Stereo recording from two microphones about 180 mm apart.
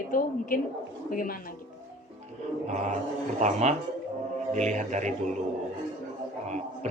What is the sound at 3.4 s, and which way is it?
Speech, 40° right (ahead or behind).